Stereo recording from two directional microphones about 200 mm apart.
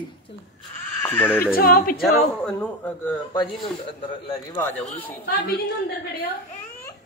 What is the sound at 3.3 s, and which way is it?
A woman's voice, 20° left (ahead or behind).